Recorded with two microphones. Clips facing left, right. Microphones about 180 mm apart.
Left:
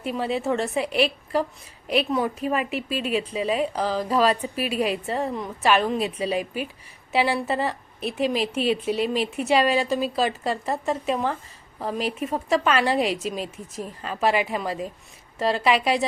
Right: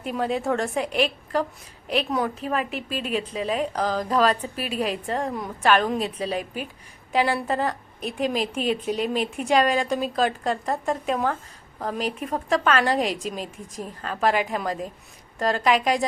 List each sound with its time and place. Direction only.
0.0 s a woman's voice: centre (ahead or behind)
2.0 s speech: 5° left (ahead or behind)
2.6 s a woman's voice: 40° right (ahead or behind)
3.1 s a woman's voice: 5° left (ahead or behind)
4.5 s a woman's voice: 40° right (ahead or behind)
4.8 s a woman's voice: 5° left (ahead or behind)